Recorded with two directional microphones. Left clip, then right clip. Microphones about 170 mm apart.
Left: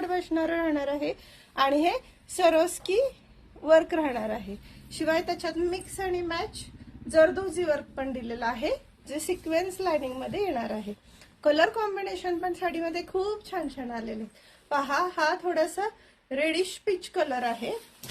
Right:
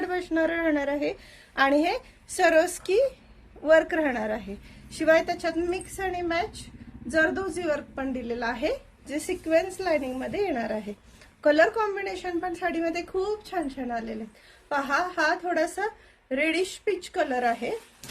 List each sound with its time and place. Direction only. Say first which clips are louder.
0.0 s a woman's voice: right 2 dB; 20° right (ahead or behind)